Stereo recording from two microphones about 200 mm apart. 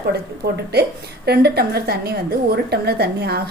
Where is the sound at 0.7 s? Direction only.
55° right (ahead or behind).